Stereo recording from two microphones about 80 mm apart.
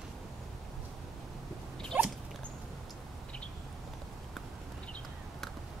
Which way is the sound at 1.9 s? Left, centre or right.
Right.